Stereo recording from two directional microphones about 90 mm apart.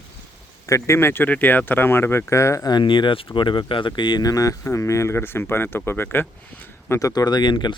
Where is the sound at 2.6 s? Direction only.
60° left (ahead or behind); by 6.3 s 25° left (ahead or behind).